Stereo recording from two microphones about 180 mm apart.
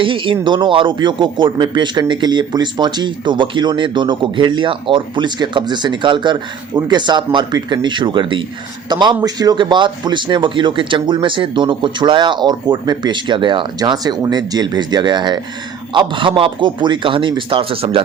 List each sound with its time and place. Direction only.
0.0 s speech: 30° right (ahead or behind)